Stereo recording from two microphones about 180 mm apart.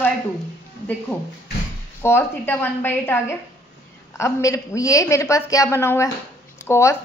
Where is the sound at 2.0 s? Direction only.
15° left (ahead or behind).